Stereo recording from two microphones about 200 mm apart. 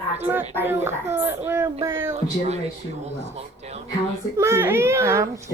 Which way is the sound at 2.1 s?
30° right (ahead or behind).